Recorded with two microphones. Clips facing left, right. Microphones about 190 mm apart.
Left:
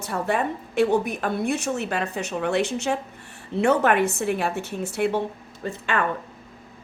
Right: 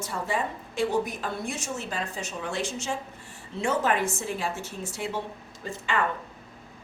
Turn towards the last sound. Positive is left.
turn(degrees=60)  # may be behind; listen again after turning